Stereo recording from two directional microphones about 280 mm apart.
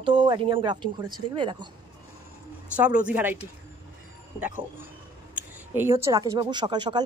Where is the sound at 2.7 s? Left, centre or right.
Centre.